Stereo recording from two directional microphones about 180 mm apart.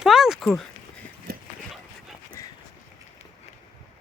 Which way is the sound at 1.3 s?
55° right (ahead or behind).